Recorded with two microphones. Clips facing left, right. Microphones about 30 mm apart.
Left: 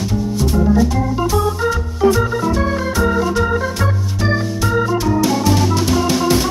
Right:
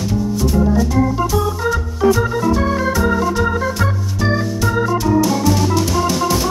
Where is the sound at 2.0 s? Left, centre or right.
Centre.